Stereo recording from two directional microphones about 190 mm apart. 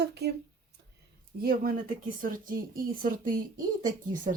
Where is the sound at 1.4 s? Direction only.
50° right (ahead or behind).